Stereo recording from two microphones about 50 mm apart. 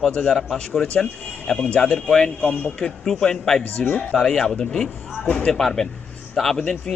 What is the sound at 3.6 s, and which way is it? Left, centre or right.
Speech, left.